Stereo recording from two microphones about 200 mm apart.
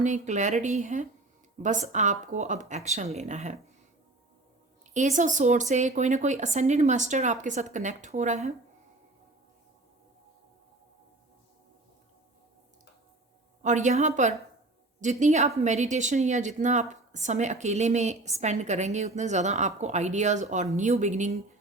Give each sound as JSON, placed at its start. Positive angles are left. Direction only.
{"t": 0.0, "sound": "a woman's voice", "side_deg": -40}
{"t": 4.9, "sound": "a woman's voice", "side_deg": -40}
{"t": 13.6, "sound": "a woman's voice", "side_deg": -35}